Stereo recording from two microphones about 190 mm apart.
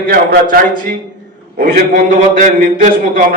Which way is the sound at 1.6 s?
50° right (ahead or behind).